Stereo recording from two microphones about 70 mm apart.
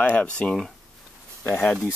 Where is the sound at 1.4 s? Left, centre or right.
Left.